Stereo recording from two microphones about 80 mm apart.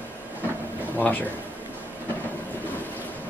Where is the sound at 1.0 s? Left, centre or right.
Left.